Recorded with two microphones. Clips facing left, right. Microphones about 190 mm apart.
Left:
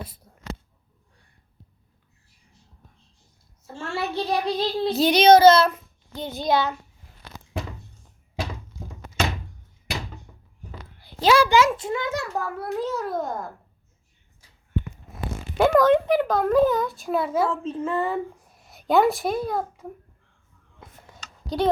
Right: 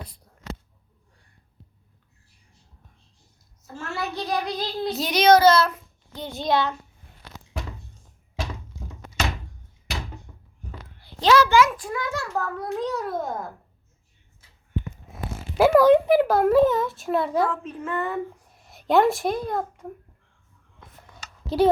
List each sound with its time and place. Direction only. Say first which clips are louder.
3.7 s child singing: left 2 dB; 30° left (ahead or behind)
6.3 s a child's voice: left 1 dB; centre (ahead or behind)
10.3 s a sound: right 1 dB; 10° left (ahead or behind)
11.2 s a child's voice: even; 10° left (ahead or behind)
11.5 s child singing: even; 25° left (ahead or behind)
12.5 s a child's voice: even; 5° left (ahead or behind)
15.5 s a child's voice: right 2 dB; 5° right (ahead or behind)
17.5 s child singing: left 3 dB; 25° left (ahead or behind)
18.6 s a child's voice: even; centre (ahead or behind)
21.4 s speech: right 4 dB; 5° right (ahead or behind)